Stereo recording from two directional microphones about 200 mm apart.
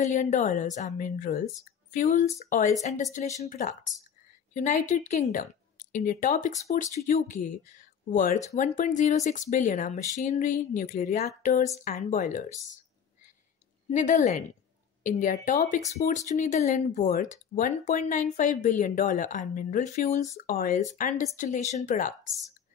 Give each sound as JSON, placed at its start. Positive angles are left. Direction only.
{"t": 0.0, "sound": "speech", "side_deg": 35}
{"t": 13.8, "sound": "speech", "side_deg": 40}